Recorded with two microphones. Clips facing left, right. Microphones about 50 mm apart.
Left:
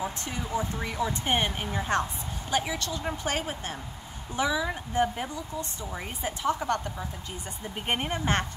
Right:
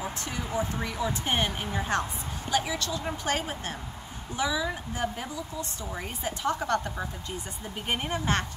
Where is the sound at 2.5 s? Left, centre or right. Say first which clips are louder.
Even; left.